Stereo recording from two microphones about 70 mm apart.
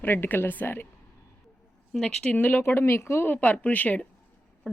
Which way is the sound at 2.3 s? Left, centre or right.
Left.